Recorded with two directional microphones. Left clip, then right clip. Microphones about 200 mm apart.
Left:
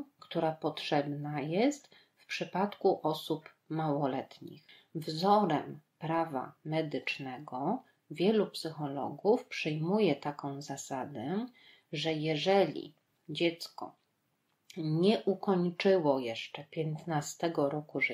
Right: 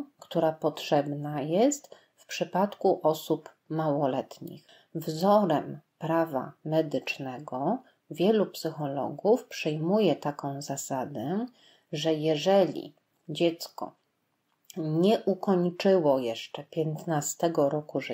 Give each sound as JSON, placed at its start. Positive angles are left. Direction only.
{"t": 0.2, "sound": "speech", "side_deg": -50}